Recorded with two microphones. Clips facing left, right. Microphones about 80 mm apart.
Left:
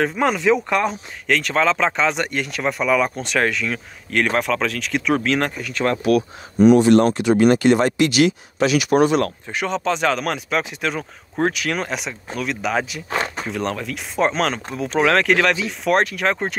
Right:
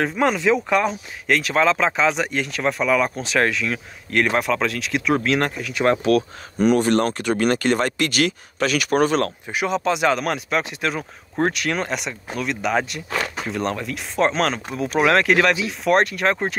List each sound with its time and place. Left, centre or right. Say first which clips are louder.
0.0 s speech: left 1 dB; centre
5.9 s speech: even; right
7.2 s speech: left 5 dB; right
9.5 s speech: right 1 dB; centre